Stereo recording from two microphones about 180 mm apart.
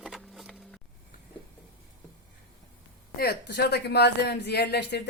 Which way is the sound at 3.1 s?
60° left (ahead or behind).